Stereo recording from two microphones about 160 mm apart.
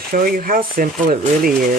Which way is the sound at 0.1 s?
60° right (ahead or behind).